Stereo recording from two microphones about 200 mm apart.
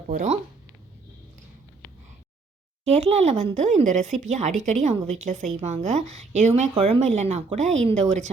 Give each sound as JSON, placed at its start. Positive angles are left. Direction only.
{"t": 0.1, "sound": "a woman's voice", "side_deg": -35}
{"t": 2.8, "sound": "a woman's voice", "side_deg": -30}